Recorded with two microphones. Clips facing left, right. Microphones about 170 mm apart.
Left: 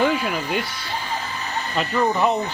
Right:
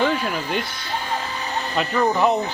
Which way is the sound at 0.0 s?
5° left (ahead or behind).